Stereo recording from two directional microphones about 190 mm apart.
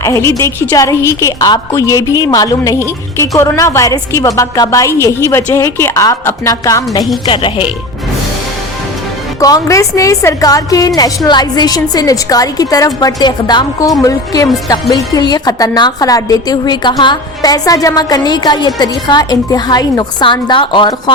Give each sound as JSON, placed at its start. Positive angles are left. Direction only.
{"t": 0.0, "sound": "a woman's voice", "side_deg": 15}
{"t": 9.4, "sound": "a woman's voice", "side_deg": 20}